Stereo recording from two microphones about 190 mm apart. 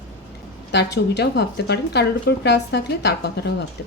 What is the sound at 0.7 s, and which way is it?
A woman's voice, 65° left (ahead or behind).